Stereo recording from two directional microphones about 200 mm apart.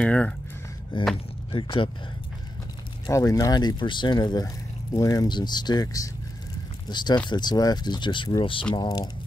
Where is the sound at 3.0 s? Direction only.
15° left (ahead or behind).